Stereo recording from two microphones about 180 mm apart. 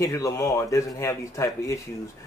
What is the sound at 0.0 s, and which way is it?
Speech, 20° left (ahead or behind).